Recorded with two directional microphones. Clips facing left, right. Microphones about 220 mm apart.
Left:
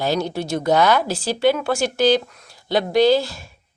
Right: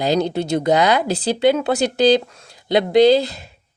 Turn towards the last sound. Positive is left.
turn(degrees=-20)  # may be behind; listen again after turning